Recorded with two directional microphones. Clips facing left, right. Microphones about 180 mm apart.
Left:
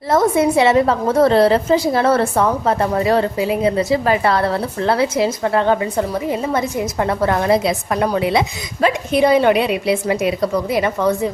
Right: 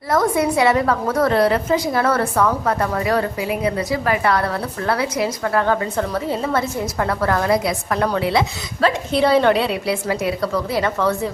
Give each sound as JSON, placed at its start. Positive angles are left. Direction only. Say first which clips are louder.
{"t": 0.1, "sound": "a woman's voice", "louder": "left 3 dB", "side_deg": 25}